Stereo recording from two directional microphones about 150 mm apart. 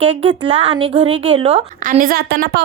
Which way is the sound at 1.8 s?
60° right (ahead or behind).